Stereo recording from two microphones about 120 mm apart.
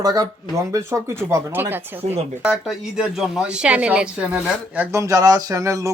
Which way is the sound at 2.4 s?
5° right (ahead or behind).